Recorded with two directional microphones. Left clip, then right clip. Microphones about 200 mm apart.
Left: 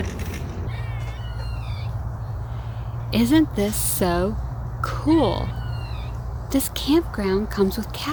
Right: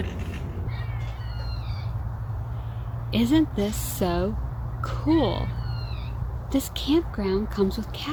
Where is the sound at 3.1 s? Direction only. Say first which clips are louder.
Left 3 dB; centre (ahead or behind).